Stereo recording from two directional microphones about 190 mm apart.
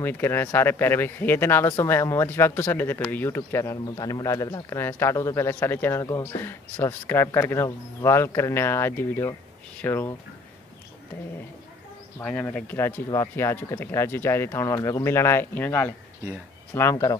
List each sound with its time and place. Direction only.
0.0 s speech: 10° left (ahead or behind)
12.2 s speech: 10° left (ahead or behind)